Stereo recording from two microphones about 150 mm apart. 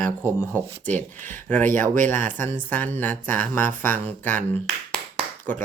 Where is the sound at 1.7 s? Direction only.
15° left (ahead or behind).